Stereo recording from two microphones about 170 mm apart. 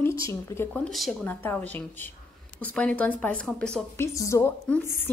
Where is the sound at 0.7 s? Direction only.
5° left (ahead or behind).